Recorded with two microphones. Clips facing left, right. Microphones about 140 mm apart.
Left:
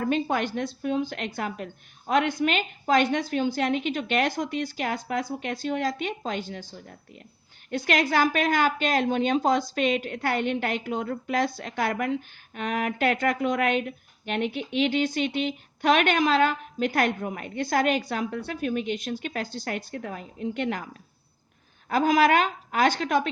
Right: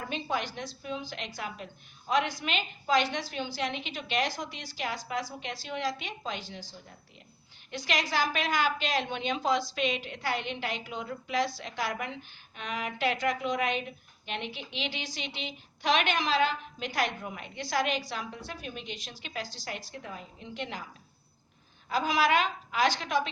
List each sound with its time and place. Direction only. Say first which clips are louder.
0.0 s speech: left 8 dB; 50° left (ahead or behind)
21.8 s speech: left 6 dB; 50° left (ahead or behind)